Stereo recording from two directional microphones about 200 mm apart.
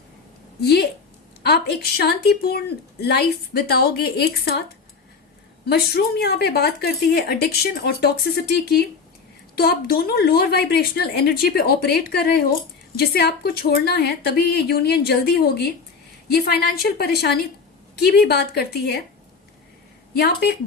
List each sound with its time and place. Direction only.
0.6 s a woman's voice: 55° left (ahead or behind)
5.6 s a woman's voice: 55° left (ahead or behind)
20.1 s a woman's voice: 50° left (ahead or behind)